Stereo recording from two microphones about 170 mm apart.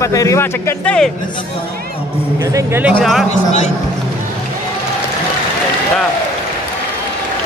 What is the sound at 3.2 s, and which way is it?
Speech, 45° left (ahead or behind).